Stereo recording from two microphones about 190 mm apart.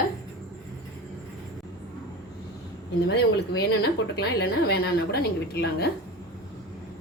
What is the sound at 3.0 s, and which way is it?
A woman's voice, 60° left (ahead or behind).